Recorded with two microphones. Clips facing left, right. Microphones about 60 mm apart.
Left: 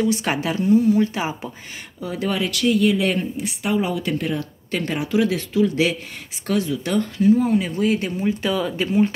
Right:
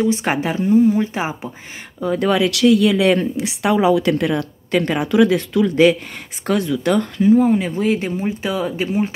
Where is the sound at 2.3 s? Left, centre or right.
Right.